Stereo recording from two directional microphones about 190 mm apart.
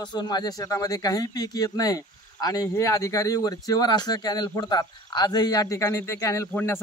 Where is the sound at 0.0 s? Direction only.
20° left (ahead or behind).